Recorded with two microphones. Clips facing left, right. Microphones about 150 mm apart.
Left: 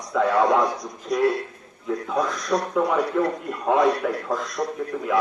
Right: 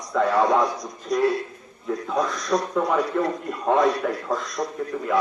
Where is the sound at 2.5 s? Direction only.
5° left (ahead or behind).